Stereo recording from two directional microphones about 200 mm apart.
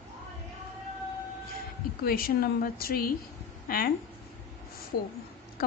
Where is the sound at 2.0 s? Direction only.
45° left (ahead or behind).